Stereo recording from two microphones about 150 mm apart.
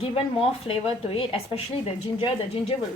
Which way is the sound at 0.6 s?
40° left (ahead or behind).